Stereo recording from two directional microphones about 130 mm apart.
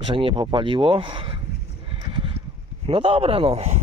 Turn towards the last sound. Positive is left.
turn(degrees=-50)  # may be behind; listen again after turning